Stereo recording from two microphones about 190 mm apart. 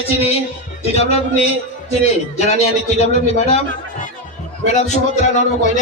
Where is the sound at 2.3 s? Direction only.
35° left (ahead or behind).